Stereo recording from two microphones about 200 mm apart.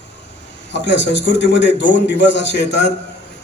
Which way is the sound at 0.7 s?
60° left (ahead or behind).